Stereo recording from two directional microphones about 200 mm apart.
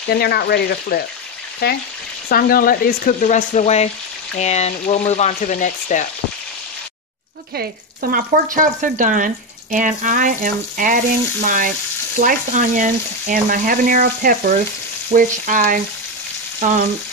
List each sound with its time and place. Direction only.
0.1 s speech: 50° left (ahead or behind)
2.2 s speech: 50° left (ahead or behind)
4.4 s frying: 35° left (ahead or behind)
8.1 s speech: 45° right (ahead or behind)
11.4 s frying: 40° right (ahead or behind)